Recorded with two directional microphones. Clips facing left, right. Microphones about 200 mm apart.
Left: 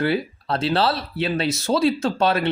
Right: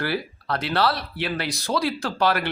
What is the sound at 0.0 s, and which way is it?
Speech, 25° left (ahead or behind).